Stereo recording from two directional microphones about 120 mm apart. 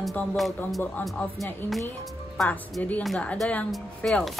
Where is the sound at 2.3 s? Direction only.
5° left (ahead or behind).